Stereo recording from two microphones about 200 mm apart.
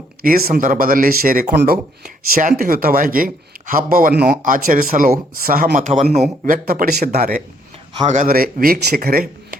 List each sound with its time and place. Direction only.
0.2 s a man's voice: 50° right (ahead or behind)
6.4 s speech: 45° right (ahead or behind)